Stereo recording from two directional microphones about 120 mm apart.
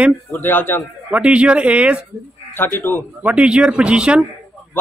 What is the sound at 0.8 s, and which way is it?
Speech, 10° right (ahead or behind).